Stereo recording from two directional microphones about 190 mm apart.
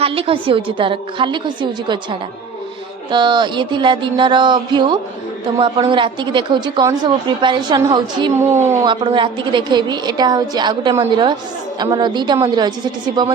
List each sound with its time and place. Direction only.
0.0 s a woman's voice: 30° right (ahead or behind)
3.1 s a woman's voice: 25° right (ahead or behind)
8.9 s a woman's voice: 25° right (ahead or behind)